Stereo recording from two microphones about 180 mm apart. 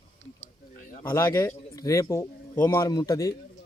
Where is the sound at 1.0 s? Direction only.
15° left (ahead or behind).